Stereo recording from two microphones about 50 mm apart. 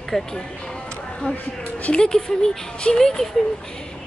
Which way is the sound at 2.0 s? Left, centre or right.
Centre.